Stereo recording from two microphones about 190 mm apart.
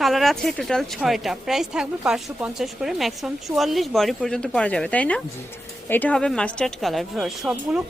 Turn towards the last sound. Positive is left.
turn(degrees=-5)  # may be behind; listen again after turning